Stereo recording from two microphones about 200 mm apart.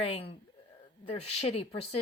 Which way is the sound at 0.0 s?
30° left (ahead or behind).